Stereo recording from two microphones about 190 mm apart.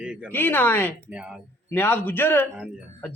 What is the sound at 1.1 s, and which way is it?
Speech, 5° right (ahead or behind).